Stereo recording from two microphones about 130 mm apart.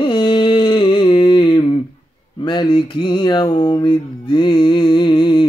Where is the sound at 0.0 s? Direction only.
40° left (ahead or behind).